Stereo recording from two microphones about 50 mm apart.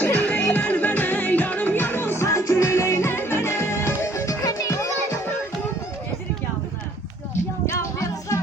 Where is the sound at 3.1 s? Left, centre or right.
Left.